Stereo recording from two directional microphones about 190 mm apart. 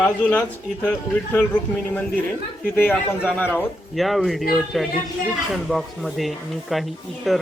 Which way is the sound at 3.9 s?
Centre (ahead or behind).